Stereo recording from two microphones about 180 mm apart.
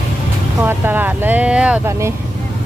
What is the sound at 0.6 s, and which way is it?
Speech, 10° right (ahead or behind).